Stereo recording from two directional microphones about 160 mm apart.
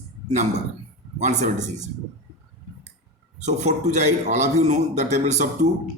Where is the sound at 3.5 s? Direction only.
45° right (ahead or behind).